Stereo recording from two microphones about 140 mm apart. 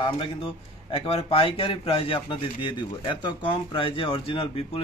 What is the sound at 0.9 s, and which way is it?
A man's voice, 40° left (ahead or behind).